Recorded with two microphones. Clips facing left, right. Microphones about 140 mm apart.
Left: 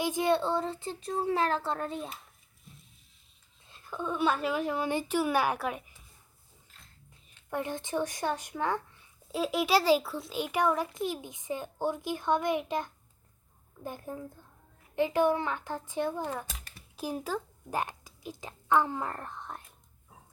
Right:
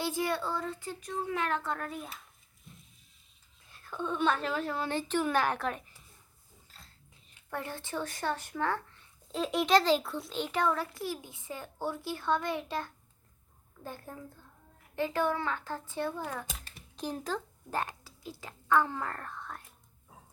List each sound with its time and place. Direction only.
0.0 s a woman's voice: 20° left (ahead or behind)
3.7 s a sound: 20° left (ahead or behind)
3.9 s a child's voice: 10° left (ahead or behind)
7.5 s a child's voice: 15° left (ahead or behind)
9.3 s a child's voice: 5° left (ahead or behind)
18.0 s whispering: 15° left (ahead or behind)